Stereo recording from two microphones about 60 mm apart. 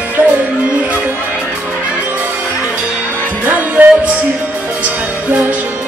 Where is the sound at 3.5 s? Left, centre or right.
Right.